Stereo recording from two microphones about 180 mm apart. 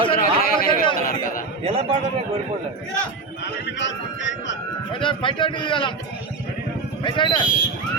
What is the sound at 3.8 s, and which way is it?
Speech, 90° left.